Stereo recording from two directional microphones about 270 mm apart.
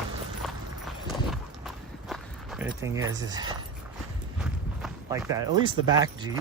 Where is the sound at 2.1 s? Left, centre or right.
Centre.